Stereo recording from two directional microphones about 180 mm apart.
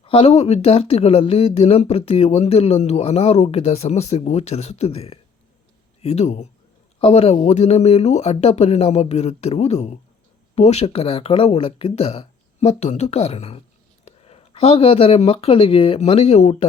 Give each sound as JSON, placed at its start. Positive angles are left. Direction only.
{"t": 0.0, "sound": "speech", "side_deg": 30}